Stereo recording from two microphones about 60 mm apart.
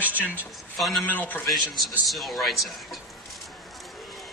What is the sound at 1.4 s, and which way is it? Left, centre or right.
A man's voice, centre.